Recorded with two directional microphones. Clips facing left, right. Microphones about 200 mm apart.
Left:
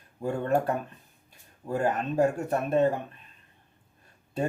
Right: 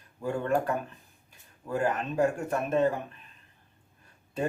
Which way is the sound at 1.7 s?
35° left (ahead or behind).